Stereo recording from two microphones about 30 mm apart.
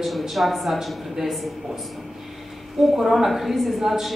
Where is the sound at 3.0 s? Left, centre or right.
Centre.